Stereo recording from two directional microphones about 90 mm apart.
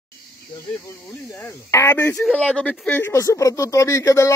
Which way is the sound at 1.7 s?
30° left (ahead or behind).